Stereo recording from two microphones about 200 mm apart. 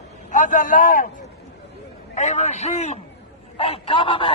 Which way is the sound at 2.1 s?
35° left (ahead or behind).